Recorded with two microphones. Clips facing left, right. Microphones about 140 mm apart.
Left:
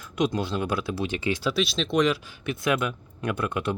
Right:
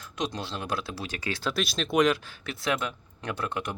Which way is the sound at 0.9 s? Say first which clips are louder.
Left 7 dB; 20° left (ahead or behind).